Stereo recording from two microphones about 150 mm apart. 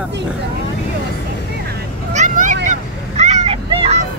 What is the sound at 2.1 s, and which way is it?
Vehicle, 60° right (ahead or behind).